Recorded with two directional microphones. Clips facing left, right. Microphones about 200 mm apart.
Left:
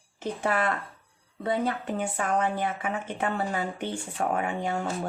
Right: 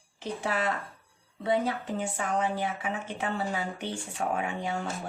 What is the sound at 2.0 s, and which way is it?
Speech, 55° left (ahead or behind).